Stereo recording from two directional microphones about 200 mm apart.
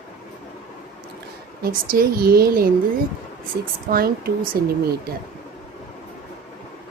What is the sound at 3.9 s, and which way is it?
Speech, 45° right (ahead or behind).